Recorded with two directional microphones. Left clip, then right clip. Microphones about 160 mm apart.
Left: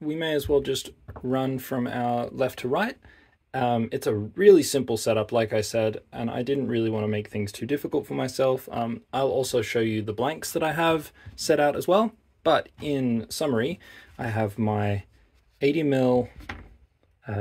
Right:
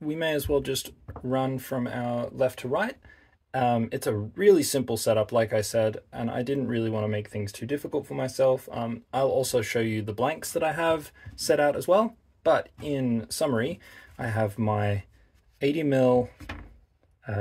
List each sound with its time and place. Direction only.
0.0 s speech: 15° left (ahead or behind); by 3.0 s 40° left (ahead or behind)
3.5 s speech: 20° left (ahead or behind); by 9.2 s 35° left (ahead or behind)
9.2 s speech: 20° left (ahead or behind)